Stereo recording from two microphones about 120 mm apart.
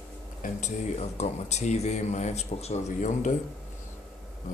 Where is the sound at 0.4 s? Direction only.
75° left (ahead or behind); by 3.3 s 90° left.